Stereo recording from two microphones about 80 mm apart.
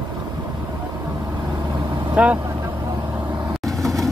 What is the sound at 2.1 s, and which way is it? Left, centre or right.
Vehicle, centre.